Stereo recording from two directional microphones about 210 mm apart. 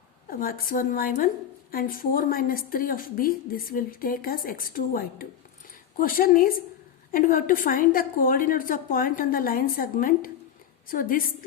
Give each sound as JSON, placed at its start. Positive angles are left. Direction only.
{"t": 0.3, "sound": "a woman's voice", "side_deg": 40}